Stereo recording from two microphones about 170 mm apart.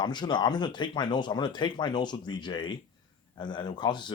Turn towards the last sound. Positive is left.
turn(degrees=25)  # may be behind; listen again after turning